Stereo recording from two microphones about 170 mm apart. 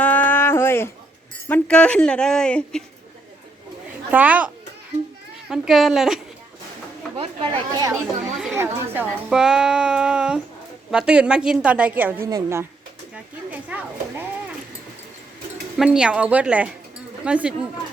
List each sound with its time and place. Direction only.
0.0 s a sound: 10° left (ahead or behind)
1.5 s speech: 10° left (ahead or behind)
4.1 s a woman's voice: 10° right (ahead or behind)
7.2 s speech: 30° right (ahead or behind)
8.0 s speech: centre (ahead or behind)
8.5 s a woman's voice: 15° right (ahead or behind)
15.8 s a woman's voice: 5° right (ahead or behind)